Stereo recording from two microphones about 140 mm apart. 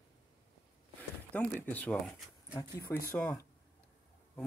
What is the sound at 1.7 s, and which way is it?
Speech, 10° left (ahead or behind).